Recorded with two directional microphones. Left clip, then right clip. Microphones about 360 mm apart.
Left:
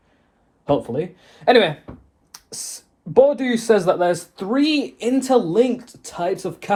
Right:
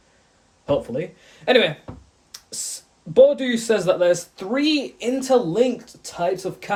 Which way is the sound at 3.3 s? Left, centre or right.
Centre.